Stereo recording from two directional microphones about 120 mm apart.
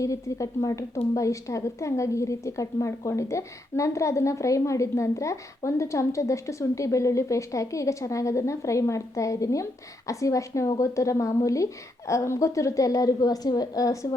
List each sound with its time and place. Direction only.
0.0 s a woman's voice: 25° left (ahead or behind)